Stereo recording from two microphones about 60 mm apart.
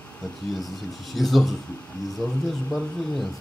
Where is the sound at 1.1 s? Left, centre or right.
Centre.